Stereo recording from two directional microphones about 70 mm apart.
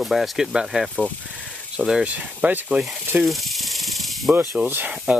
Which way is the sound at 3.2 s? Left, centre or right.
Centre.